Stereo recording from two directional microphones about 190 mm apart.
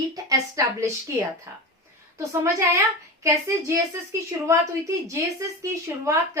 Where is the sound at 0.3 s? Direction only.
15° right (ahead or behind).